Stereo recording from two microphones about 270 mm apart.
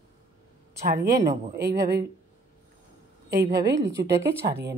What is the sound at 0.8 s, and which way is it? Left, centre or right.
Speech, right.